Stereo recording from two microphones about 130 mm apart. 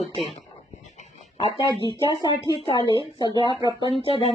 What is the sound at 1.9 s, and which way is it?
Speech, 40° left (ahead or behind).